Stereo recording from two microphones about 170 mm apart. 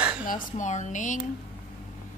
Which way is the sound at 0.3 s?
45° left (ahead or behind).